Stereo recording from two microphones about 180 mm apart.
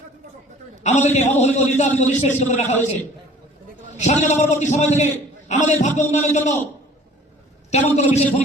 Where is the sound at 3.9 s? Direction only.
40° left (ahead or behind).